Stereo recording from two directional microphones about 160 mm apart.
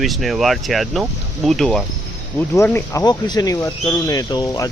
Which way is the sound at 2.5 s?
15° left (ahead or behind).